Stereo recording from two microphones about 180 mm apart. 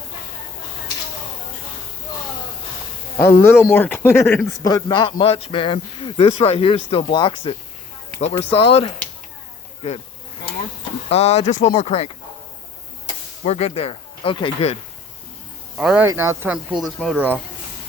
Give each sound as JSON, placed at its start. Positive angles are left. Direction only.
{"t": 3.2, "sound": "speech", "side_deg": 10}
{"t": 4.5, "sound": "a man's voice", "side_deg": 20}
{"t": 11.1, "sound": "speech", "side_deg": 35}
{"t": 13.4, "sound": "speech", "side_deg": 35}
{"t": 15.8, "sound": "speech", "side_deg": 0}
{"t": 16.0, "sound": "speech", "side_deg": -15}